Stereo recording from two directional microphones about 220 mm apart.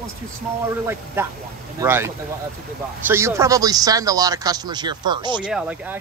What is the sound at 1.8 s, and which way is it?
Speech, 10° right (ahead or behind).